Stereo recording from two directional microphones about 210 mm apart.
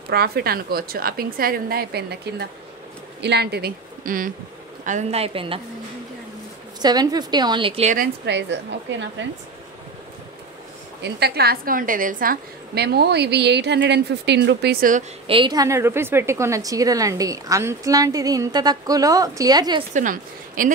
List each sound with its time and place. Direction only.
0.1 s a woman's voice: 50° right (ahead or behind); by 5.6 s 25° right (ahead or behind)
6.8 s a woman's voice: 20° right (ahead or behind); by 8.1 s 35° right (ahead or behind)
8.3 s a woman's voice: 55° right (ahead or behind)
11.0 s a woman's voice: 50° right (ahead or behind)
15.2 s a woman's voice: 25° right (ahead or behind)
19.9 s speech: 40° right (ahead or behind)